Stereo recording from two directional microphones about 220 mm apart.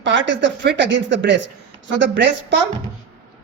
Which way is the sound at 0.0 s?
55° right (ahead or behind).